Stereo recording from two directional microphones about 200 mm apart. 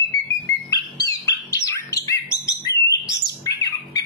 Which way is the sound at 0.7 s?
20° left (ahead or behind).